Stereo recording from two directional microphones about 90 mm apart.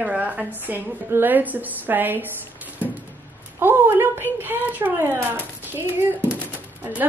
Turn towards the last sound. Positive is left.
turn(degrees=-20)  # may be behind; listen again after turning